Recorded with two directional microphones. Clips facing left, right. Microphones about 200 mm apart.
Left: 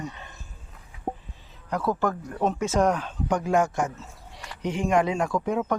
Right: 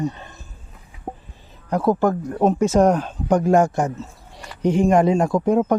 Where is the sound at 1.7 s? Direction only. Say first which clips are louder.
Right 7 dB; 45° right (ahead or behind).